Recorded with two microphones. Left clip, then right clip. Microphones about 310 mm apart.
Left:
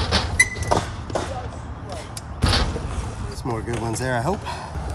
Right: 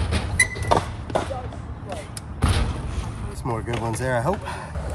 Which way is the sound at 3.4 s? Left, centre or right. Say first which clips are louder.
Even; centre.